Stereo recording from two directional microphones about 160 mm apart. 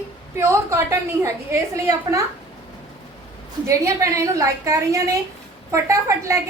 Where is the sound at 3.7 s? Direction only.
20° right (ahead or behind).